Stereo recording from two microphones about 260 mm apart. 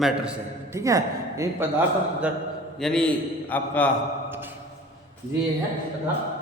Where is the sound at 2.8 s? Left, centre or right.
Centre.